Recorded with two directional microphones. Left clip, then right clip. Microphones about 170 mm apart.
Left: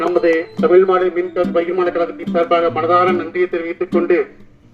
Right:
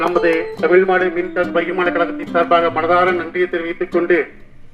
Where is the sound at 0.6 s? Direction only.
20° right (ahead or behind).